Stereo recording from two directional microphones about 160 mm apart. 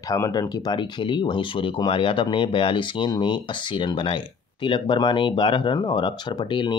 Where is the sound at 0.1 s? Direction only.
25° left (ahead or behind).